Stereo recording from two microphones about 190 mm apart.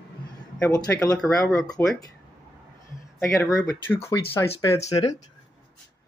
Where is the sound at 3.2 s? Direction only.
10° left (ahead or behind).